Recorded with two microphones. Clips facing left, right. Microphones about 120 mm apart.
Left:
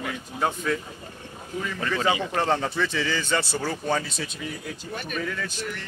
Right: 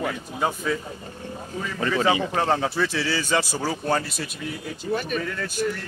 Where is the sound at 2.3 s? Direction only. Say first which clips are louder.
Right 2 dB; 5° right (ahead or behind).